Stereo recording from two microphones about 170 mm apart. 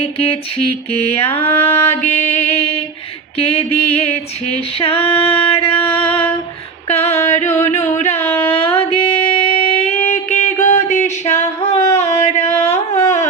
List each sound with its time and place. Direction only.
0.0 s female singing: 35° left (ahead or behind)
6.8 s a sound: 40° left (ahead or behind)
11.9 s carnatic music: 40° left (ahead or behind)